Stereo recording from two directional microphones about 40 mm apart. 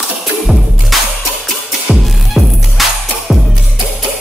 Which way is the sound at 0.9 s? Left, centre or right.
Centre.